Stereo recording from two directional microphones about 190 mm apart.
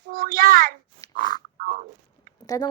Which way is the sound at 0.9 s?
20° left (ahead or behind).